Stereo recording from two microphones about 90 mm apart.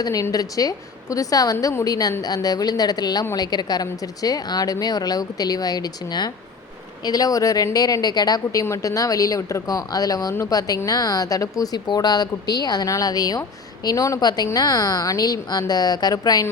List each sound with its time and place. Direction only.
0.0 s a woman's voice: 40° left (ahead or behind)
8.6 s a woman's voice: 35° left (ahead or behind)
14.2 s a woman's voice: 50° left (ahead or behind)